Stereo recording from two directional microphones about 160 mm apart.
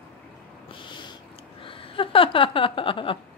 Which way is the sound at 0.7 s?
30° left (ahead or behind).